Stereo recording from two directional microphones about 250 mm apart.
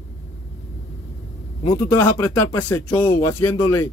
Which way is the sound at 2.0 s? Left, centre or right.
Centre.